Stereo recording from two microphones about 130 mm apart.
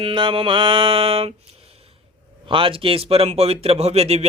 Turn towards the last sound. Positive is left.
turn(degrees=-55)  # may be behind; listen again after turning